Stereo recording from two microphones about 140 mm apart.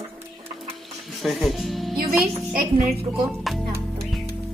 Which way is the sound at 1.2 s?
Centre (ahead or behind).